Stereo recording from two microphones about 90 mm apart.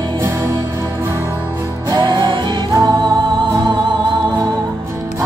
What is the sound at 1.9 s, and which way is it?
Music, 55° right (ahead or behind).